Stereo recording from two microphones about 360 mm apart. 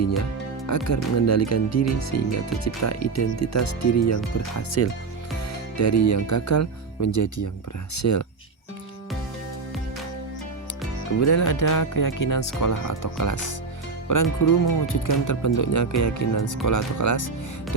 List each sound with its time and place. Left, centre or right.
0.9 s speech: left
11.2 s speech: left